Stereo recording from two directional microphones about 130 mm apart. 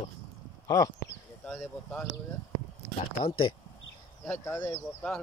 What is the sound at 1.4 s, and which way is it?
Speech, 5° left (ahead or behind).